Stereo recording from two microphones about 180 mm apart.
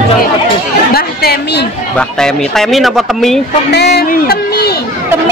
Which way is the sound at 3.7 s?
65° left (ahead or behind).